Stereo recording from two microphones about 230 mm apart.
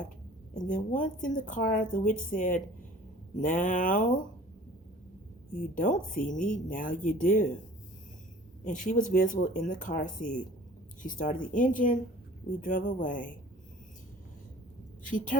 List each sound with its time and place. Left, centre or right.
0.5 s speech: left
5.5 s speech: left
8.6 s speech: left
15.0 s speech: left